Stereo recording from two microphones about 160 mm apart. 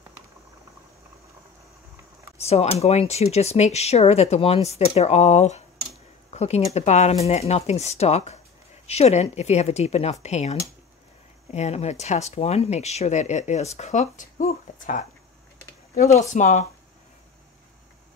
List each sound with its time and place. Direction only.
2.3 s speech: 40° left (ahead or behind)